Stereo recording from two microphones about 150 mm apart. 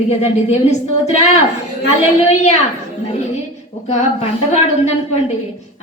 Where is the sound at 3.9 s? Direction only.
50° left (ahead or behind).